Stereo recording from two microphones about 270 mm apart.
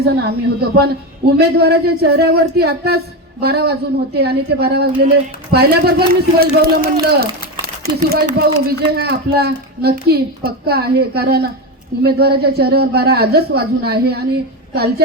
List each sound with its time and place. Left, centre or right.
0.0 s a woman's voice: right